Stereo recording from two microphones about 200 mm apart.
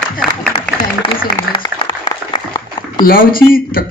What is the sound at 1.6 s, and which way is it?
Applause, 25° left (ahead or behind).